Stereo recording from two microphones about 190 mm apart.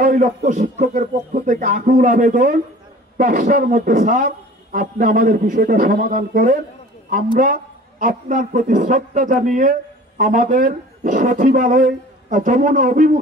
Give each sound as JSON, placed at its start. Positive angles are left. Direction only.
{"t": 0.0, "sound": "a man's voice", "side_deg": -45}